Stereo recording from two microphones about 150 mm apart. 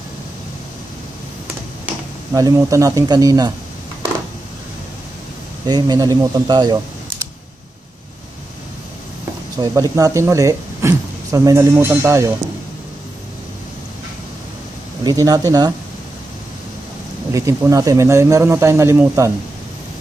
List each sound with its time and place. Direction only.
2.3 s speech: 20° right (ahead or behind)
5.7 s speech: 25° right (ahead or behind)
9.6 s speech: 25° right (ahead or behind)
15.0 s speech: 25° right (ahead or behind)
17.3 s speech: 20° right (ahead or behind)